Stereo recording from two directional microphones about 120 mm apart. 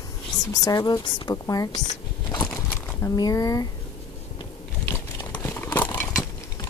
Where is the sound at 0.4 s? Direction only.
30° left (ahead or behind).